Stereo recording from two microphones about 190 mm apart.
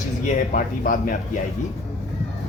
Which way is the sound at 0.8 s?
45° left (ahead or behind).